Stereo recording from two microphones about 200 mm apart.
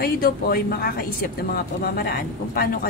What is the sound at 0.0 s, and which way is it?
A woman's voice, 50° left (ahead or behind).